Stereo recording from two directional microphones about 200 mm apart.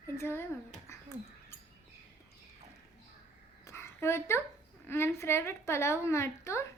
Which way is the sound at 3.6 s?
15° left (ahead or behind).